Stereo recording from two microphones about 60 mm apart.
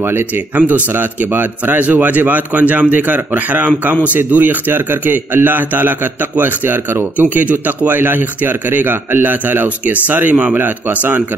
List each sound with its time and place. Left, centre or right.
0.6 s a man's voice: right